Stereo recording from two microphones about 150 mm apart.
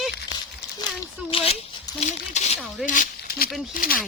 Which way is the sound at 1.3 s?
40° left (ahead or behind).